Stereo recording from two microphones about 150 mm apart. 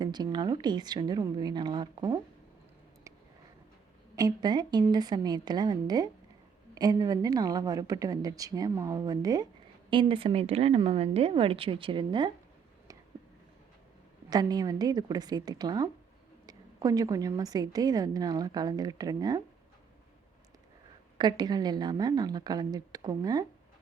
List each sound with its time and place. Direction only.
0.0 s a woman's voice: 25° right (ahead or behind)
4.1 s a woman's voice: 25° right (ahead or behind)
14.3 s a woman's voice: 25° right (ahead or behind)
21.2 s a woman's voice: 30° right (ahead or behind)